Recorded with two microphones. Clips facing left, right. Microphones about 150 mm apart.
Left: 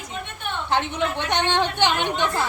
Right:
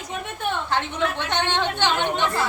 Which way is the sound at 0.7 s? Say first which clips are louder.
Left 5 dB; 20° left (ahead or behind).